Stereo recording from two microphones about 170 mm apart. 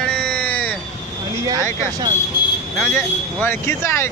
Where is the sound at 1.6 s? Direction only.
15° left (ahead or behind).